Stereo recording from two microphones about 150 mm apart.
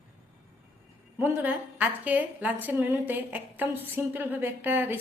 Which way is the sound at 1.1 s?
10° right (ahead or behind).